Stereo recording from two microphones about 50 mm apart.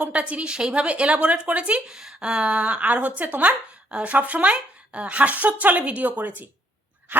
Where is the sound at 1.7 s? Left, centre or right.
Centre.